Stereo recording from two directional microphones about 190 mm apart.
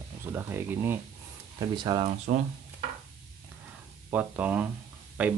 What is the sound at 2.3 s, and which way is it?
Speech, 40° right (ahead or behind).